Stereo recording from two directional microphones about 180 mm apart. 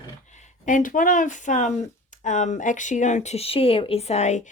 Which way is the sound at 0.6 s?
45° left (ahead or behind).